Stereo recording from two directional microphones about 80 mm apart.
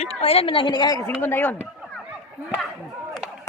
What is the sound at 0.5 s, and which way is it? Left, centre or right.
Speech, left.